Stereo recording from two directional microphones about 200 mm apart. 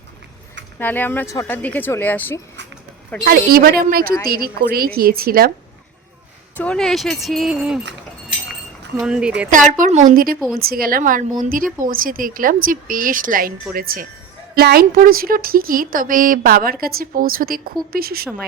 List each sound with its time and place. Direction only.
0.8 s speech: 10° left (ahead or behind)
3.2 s speech: 50° right (ahead or behind)
6.6 s speech: 5° left (ahead or behind)
9.0 s speech: 5° right (ahead or behind)
9.5 s a woman's voice: 40° right (ahead or behind)